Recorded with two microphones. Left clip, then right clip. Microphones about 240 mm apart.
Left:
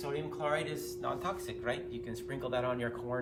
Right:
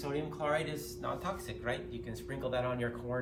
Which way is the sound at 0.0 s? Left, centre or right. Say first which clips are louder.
Even; centre.